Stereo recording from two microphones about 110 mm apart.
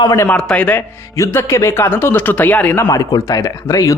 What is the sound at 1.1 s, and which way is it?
Speech, 25° left (ahead or behind).